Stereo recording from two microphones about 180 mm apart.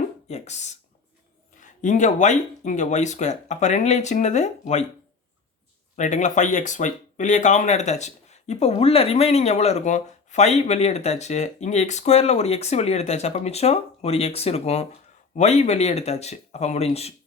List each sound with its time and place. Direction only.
0.3 s speech: 40° left (ahead or behind)
6.0 s speech: 40° left (ahead or behind)